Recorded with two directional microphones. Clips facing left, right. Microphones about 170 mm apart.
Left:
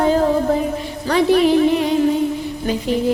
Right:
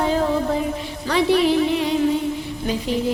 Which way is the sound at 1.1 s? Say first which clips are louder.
Left 3 dB; 45° left (ahead or behind).